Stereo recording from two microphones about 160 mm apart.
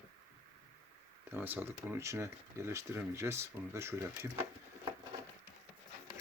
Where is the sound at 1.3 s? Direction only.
10° right (ahead or behind).